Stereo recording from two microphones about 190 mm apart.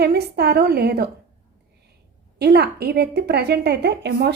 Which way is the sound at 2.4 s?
60° right (ahead or behind).